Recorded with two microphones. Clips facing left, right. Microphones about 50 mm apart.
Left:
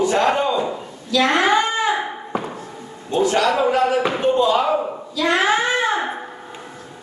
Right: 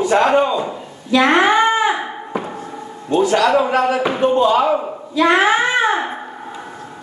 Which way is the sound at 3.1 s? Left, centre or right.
Right.